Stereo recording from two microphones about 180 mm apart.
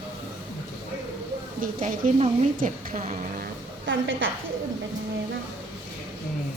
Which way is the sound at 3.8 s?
90° right.